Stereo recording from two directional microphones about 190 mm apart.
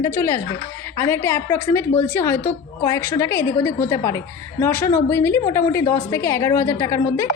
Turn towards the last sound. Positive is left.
turn(degrees=15)  # may be behind; listen again after turning